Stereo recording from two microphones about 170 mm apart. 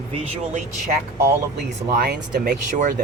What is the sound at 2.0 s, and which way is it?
Speech, 70° right (ahead or behind).